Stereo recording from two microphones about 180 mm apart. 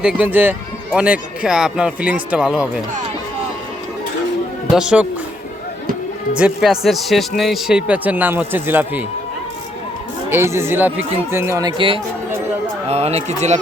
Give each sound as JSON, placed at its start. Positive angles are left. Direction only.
{"t": 0.0, "sound": "speech", "side_deg": -5}
{"t": 4.7, "sound": "speech", "side_deg": -5}
{"t": 6.3, "sound": "speech", "side_deg": -5}
{"t": 10.2, "sound": "speech", "side_deg": -15}
{"t": 12.9, "sound": "speech", "side_deg": -35}